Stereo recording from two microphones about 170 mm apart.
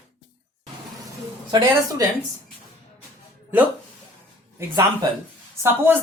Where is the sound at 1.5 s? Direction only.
25° right (ahead or behind).